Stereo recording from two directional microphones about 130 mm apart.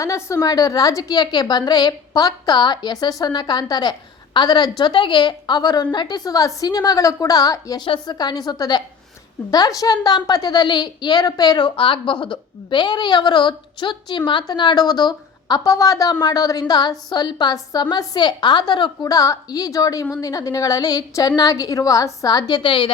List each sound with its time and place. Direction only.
0.0 s a woman's voice: 25° left (ahead or behind); by 22.9 s 40° left (ahead or behind)